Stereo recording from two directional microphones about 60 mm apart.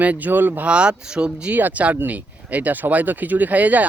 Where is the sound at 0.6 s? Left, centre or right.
Centre.